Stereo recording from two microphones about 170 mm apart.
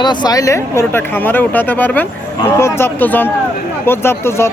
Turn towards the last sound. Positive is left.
turn(degrees=15)  # may be behind; listen again after turning